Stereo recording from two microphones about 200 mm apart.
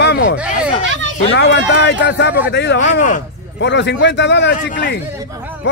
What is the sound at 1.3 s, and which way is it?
Speech, 60° left (ahead or behind).